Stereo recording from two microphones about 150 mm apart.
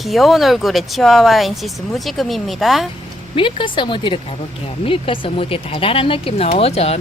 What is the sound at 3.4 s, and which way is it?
Speech, 35° left (ahead or behind).